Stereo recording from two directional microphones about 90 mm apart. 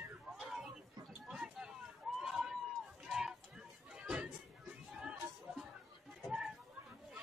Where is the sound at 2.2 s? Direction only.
5° right (ahead or behind).